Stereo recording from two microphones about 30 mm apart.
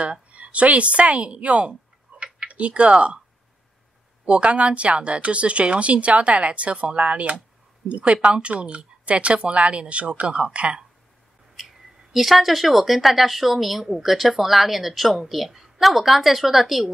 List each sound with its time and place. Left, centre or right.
0.0 s a woman's voice: right
4.3 s speech: right
11.5 s a woman's voice: centre